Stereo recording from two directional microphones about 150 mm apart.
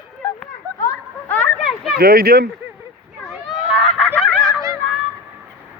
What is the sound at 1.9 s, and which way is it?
Speech, 85° right.